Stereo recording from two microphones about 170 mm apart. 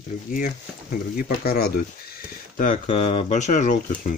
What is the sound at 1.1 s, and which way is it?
Speech, 65° left (ahead or behind).